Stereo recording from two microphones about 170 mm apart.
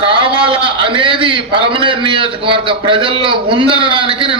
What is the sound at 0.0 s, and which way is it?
A man's voice, 30° right (ahead or behind).